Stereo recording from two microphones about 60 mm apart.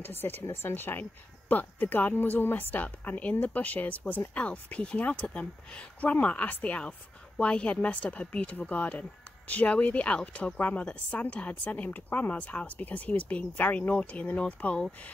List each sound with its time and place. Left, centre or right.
0.0 s speech: left